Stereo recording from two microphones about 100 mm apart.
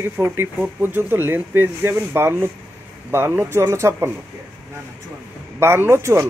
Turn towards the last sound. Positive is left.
turn(degrees=-30)  # may be behind; listen again after turning